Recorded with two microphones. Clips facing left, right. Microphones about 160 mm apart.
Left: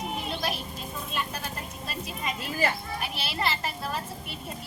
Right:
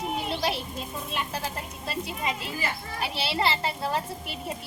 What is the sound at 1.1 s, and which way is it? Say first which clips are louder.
A child's voice: right 2 dB; 25° right (ahead or behind).